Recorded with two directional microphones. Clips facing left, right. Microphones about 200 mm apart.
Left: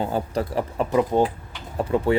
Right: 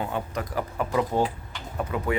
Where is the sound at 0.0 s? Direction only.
30° left (ahead or behind).